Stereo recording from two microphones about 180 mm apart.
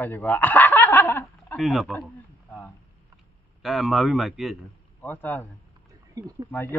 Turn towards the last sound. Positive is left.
turn(degrees=-20)  # may be behind; listen again after turning